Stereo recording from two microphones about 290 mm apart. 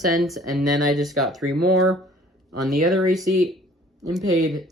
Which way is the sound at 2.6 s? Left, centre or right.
Centre.